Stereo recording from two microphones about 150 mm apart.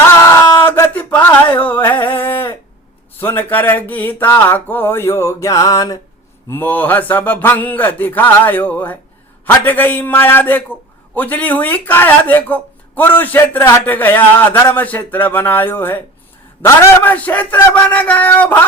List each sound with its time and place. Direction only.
0.2 s a sound: 20° left (ahead or behind)
3.2 s a man's voice: 15° left (ahead or behind)
6.5 s a man's voice: 10° left (ahead or behind)